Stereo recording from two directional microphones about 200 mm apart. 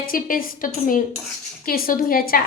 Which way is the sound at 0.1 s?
45° left (ahead or behind).